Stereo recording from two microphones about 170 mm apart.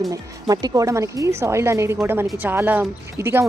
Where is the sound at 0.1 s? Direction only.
20° right (ahead or behind).